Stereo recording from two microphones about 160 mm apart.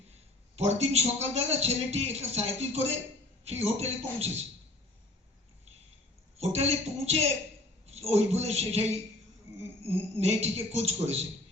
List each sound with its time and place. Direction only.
0.5 s a man's voice: 40° right (ahead or behind)
6.3 s a man's voice: 40° right (ahead or behind)